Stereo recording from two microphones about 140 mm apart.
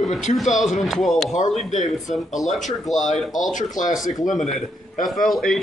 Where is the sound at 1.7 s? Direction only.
60° left (ahead or behind).